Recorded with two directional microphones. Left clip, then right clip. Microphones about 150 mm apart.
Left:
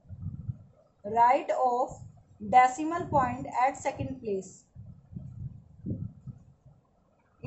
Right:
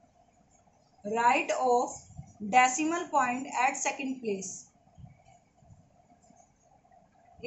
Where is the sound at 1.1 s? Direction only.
90° left.